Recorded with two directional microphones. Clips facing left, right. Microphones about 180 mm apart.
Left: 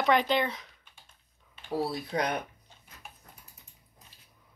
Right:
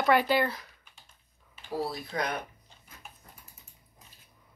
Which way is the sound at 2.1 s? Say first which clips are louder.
Left 2 dB; 30° left (ahead or behind).